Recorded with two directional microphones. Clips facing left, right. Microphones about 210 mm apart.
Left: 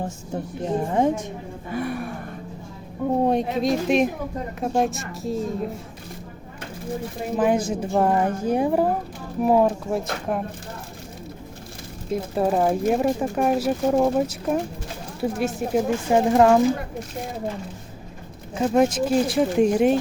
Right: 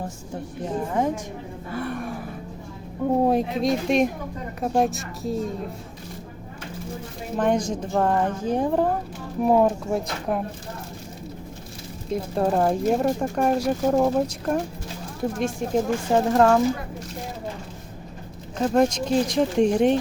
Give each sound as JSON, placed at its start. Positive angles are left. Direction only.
{"t": 0.9, "sound": "a woman's voice", "side_deg": 25}
{"t": 1.7, "sound": "a woman's voice", "side_deg": 15}
{"t": 2.0, "sound": "speech", "side_deg": 0}
{"t": 7.3, "sound": "a woman's voice", "side_deg": 5}
{"t": 12.1, "sound": "a woman's voice", "side_deg": 5}
{"t": 18.5, "sound": "speech", "side_deg": 5}